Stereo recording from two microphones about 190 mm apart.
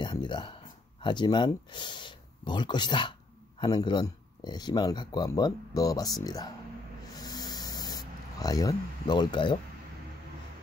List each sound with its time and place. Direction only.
0.0 s speech: 25° left (ahead or behind)
7.2 s spray: 20° left (ahead or behind)